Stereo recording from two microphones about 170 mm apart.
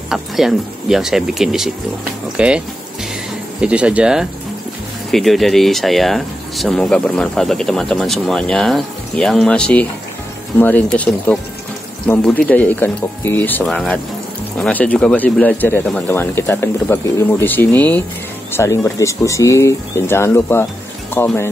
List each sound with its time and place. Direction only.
0.1 s speech: centre (ahead or behind)
2.3 s a sound: 5° right (ahead or behind)
3.6 s speech: 5° right (ahead or behind); by 21.5 s 15° left (ahead or behind)